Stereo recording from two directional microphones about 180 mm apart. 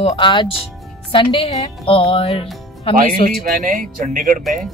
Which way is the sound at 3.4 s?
45° right (ahead or behind).